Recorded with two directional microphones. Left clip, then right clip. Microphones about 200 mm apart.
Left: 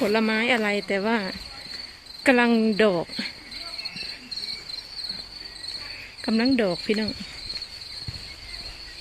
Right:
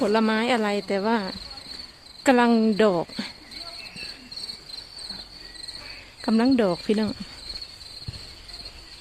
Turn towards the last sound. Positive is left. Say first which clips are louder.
# right 1 dB
turn(degrees=-15)  # may be behind; listen again after turning